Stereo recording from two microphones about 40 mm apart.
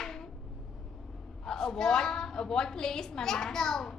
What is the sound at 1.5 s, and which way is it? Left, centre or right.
A woman's voice, centre.